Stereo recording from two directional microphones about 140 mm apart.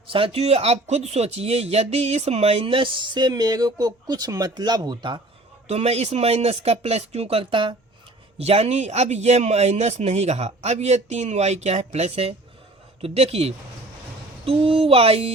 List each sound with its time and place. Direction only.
0.1 s speech: 40° right (ahead or behind)
5.6 s speech: 50° right (ahead or behind)
8.4 s speech: 50° right (ahead or behind)